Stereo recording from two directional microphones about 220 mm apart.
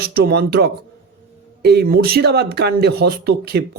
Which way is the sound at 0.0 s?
45° right (ahead or behind).